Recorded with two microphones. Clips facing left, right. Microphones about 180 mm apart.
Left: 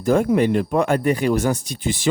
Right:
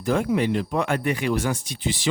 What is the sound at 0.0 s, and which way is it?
Speech, 45° left (ahead or behind).